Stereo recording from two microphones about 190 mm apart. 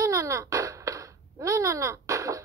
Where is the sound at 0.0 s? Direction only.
15° right (ahead or behind).